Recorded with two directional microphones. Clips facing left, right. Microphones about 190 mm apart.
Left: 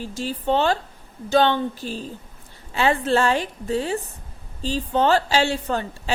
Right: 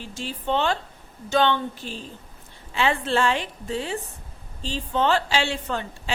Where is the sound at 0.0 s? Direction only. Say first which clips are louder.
Left 5 dB; 40° left (ahead or behind).